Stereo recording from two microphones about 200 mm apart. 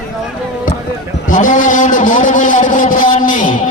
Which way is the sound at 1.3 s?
40° left (ahead or behind).